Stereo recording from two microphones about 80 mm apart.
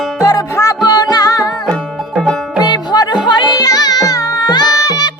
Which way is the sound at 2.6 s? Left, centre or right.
Left.